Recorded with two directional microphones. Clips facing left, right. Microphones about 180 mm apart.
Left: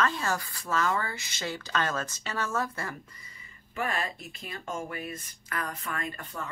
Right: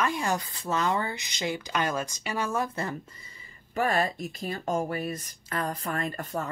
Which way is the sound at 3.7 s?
40° right (ahead or behind).